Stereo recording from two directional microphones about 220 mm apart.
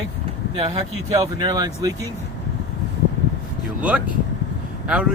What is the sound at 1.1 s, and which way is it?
Speech, 15° right (ahead or behind).